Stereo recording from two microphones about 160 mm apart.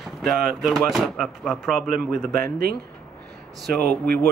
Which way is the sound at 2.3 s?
70° right (ahead or behind).